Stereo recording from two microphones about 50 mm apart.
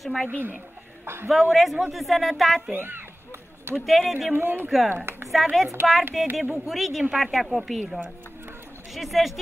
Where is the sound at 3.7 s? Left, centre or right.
Centre.